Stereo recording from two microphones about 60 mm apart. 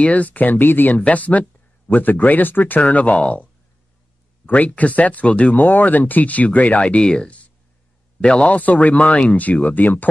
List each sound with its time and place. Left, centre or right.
0.0 s speech: left
4.5 s speech: left